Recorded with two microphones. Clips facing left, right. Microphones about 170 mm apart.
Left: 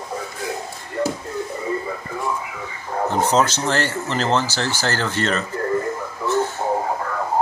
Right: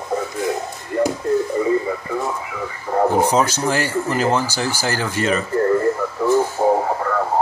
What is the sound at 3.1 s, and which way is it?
Speech, 10° right (ahead or behind).